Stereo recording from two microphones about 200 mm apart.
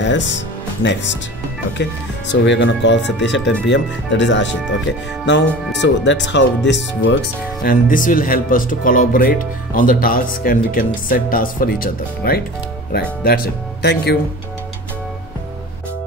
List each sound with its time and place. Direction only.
0.0 s speech: 65° left (ahead or behind)
1.8 s speech: 65° left (ahead or behind)
7.6 s speech: 45° left (ahead or behind)